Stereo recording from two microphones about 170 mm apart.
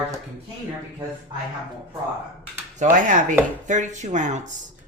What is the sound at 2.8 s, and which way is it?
Speech, 50° right (ahead or behind).